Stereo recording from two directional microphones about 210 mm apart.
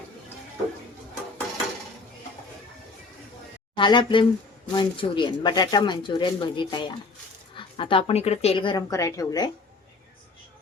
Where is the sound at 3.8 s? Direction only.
25° left (ahead or behind).